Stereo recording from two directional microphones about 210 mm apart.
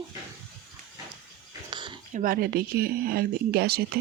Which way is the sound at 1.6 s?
20° right (ahead or behind).